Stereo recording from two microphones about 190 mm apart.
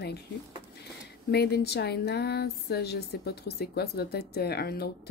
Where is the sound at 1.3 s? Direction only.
60° left (ahead or behind).